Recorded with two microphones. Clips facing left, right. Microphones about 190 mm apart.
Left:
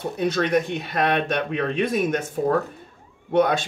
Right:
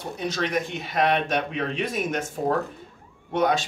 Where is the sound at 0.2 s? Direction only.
55° left (ahead or behind).